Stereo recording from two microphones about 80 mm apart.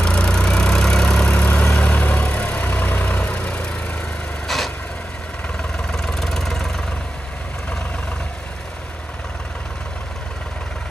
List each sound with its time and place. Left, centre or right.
0.0 s vehicle: centre
4.5 s vehicle: centre